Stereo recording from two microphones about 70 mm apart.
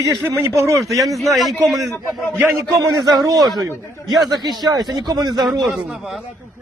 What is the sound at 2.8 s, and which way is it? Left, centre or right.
Speech, right.